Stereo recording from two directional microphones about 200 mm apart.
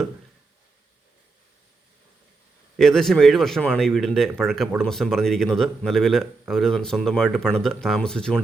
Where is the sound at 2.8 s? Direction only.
Centre (ahead or behind).